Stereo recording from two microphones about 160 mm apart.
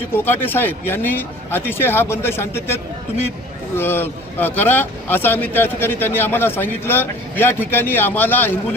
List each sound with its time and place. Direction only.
0.4 s speech: 10° left (ahead or behind)